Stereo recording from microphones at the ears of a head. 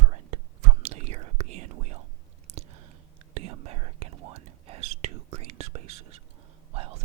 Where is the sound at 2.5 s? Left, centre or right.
Right.